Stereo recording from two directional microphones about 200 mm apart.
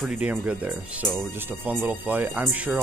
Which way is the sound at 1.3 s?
10° right (ahead or behind).